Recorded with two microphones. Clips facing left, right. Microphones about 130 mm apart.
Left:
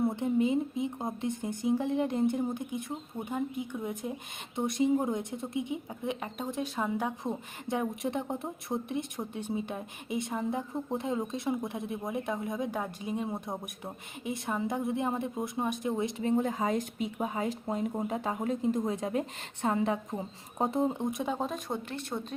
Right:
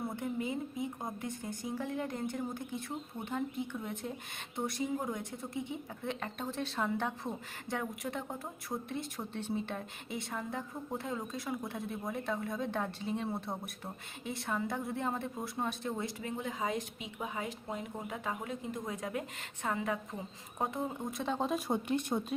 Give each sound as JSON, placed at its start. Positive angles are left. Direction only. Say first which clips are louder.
{"t": 0.0, "sound": "a woman's voice", "louder": "left 9 dB", "side_deg": 25}
{"t": 16.3, "sound": "speech", "louder": "left 8 dB", "side_deg": 45}
{"t": 21.3, "sound": "speech", "louder": "right 1 dB", "side_deg": 0}
{"t": 21.7, "sound": "speech", "louder": "right 3 dB", "side_deg": -15}